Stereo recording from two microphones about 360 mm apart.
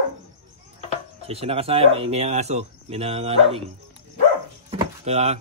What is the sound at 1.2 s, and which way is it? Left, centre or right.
Speech, centre.